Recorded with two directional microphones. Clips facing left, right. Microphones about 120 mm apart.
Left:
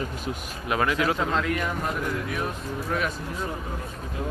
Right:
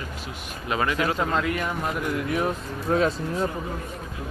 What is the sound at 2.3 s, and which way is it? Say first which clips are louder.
Speech: right 4 dB; 25° right (ahead or behind).